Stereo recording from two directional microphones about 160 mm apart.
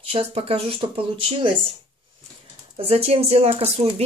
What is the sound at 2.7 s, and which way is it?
Speech, 35° right (ahead or behind).